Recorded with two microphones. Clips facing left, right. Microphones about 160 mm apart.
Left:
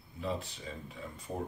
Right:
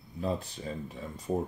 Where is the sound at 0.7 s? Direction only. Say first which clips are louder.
Right 7 dB; 45° right (ahead or behind).